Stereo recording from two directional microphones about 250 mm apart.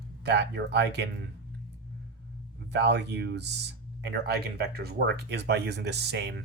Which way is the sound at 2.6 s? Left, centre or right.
Right.